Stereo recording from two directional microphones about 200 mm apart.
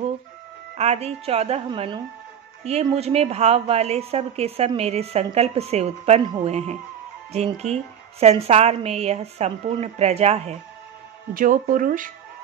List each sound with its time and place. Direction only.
0.7 s a woman's voice: 30° right (ahead or behind)